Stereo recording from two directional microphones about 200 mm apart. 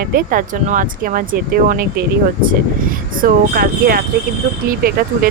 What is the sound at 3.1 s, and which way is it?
Speech, 45° right (ahead or behind).